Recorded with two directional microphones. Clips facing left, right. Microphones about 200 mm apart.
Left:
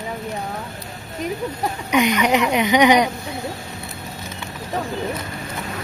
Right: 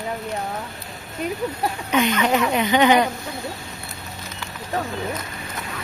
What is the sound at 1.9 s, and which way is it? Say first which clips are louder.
Speech: left 2 dB; 15° left (ahead or behind).